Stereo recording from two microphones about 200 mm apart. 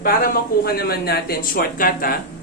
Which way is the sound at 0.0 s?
45° left (ahead or behind).